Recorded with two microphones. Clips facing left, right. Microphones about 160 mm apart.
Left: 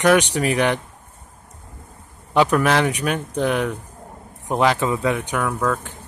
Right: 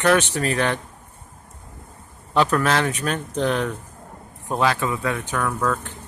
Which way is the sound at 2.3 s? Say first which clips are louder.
Left 2 dB; 15° left (ahead or behind).